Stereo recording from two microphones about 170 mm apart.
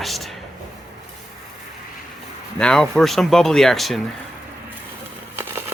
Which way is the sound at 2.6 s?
5° left (ahead or behind).